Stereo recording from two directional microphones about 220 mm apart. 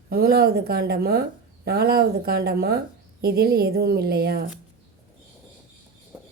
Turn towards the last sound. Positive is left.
turn(degrees=-5)  # may be behind; listen again after turning